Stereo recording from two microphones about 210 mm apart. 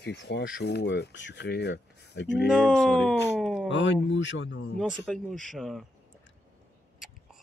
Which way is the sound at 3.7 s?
60° left (ahead or behind).